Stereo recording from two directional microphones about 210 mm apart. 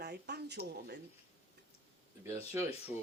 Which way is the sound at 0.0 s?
50° right (ahead or behind).